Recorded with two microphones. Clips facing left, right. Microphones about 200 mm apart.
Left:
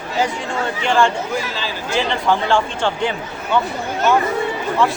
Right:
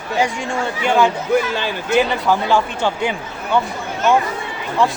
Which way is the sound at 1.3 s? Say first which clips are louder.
Right 6 dB; 55° right (ahead or behind).